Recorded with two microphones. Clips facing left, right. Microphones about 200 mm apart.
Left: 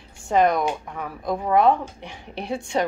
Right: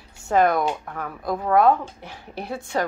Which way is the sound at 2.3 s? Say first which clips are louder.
Left 2 dB; 20° left (ahead or behind).